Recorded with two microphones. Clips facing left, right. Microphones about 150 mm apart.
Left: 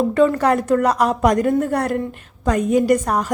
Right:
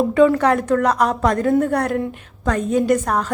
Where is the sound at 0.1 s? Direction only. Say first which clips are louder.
Right 1 dB; centre (ahead or behind).